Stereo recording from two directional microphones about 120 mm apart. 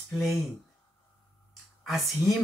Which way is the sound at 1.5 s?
Centre (ahead or behind).